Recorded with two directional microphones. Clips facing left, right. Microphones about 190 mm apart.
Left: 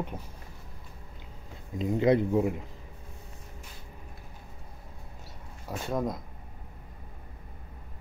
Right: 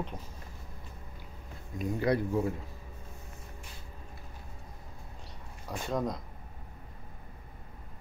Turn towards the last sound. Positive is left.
turn(degrees=5)  # may be behind; listen again after turning